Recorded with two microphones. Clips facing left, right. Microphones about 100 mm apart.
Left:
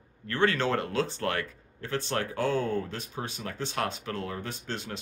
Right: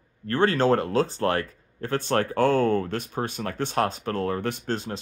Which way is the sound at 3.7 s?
40° right (ahead or behind).